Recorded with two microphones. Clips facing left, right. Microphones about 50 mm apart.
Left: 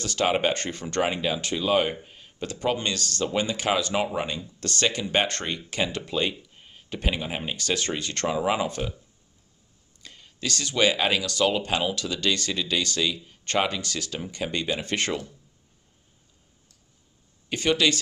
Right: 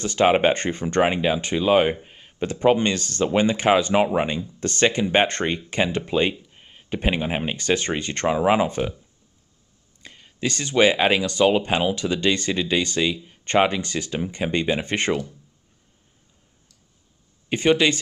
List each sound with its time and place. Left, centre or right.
0.0 s speech: right
10.0 s speech: right
17.5 s speech: right